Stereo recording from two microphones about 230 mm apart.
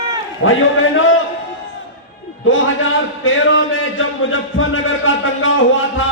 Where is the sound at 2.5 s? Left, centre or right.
Left.